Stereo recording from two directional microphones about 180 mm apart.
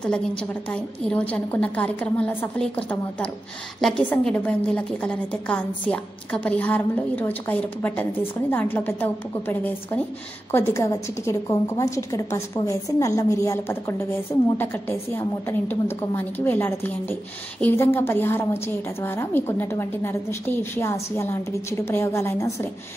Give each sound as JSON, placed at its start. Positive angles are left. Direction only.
{"t": 0.0, "sound": "a woman's voice", "side_deg": 5}